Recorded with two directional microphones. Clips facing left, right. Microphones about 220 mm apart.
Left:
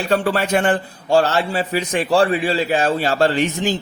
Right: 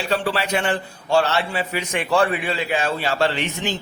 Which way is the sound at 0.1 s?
50° left (ahead or behind).